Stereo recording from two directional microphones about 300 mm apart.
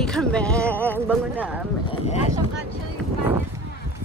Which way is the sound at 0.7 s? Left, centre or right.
Centre.